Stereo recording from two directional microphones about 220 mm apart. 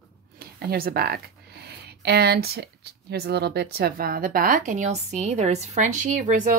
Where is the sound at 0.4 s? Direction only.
45° right (ahead or behind).